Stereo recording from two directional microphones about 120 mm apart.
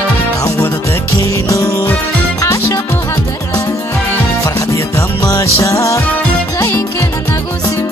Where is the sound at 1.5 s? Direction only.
25° left (ahead or behind).